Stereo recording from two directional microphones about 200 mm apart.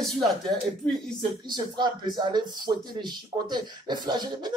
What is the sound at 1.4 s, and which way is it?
Speech, 20° right (ahead or behind).